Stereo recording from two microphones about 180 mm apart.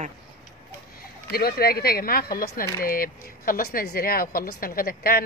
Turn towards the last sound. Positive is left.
turn(degrees=55)  # may be behind; listen again after turning